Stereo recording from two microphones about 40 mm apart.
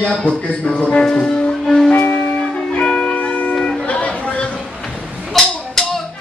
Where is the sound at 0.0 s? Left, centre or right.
Left.